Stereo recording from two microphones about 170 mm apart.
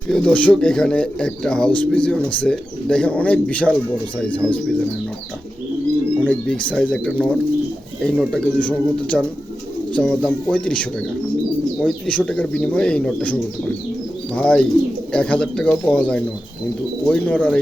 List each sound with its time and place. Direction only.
0.1 s a man's voice: 5° left (ahead or behind)
6.1 s a man's voice: 5° left (ahead or behind)
14.3 s a man's voice: 5° left (ahead or behind)